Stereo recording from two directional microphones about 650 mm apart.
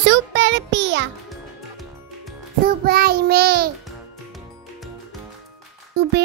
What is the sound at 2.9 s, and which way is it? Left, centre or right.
Child singing, centre.